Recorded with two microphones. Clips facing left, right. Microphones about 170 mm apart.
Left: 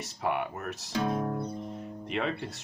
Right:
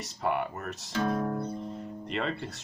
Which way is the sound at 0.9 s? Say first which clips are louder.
Right 1 dB; 15° left (ahead or behind).